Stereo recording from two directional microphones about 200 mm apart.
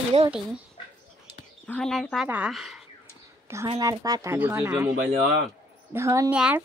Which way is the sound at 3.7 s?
20° right (ahead or behind).